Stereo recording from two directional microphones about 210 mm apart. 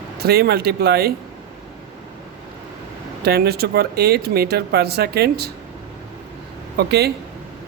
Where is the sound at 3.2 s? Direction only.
50° right (ahead or behind).